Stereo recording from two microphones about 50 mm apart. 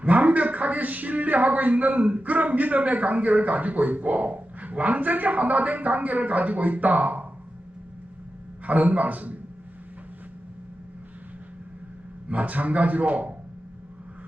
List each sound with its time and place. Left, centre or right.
0.0 s a man's voice: right
8.6 s a man's voice: right
12.3 s a man's voice: right